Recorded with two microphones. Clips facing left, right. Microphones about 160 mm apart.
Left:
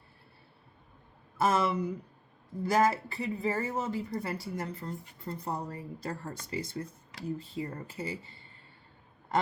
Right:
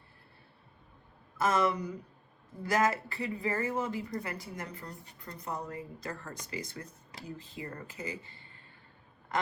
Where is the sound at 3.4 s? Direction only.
25° left (ahead or behind).